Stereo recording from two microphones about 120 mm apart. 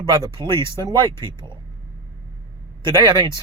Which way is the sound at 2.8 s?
40° right (ahead or behind).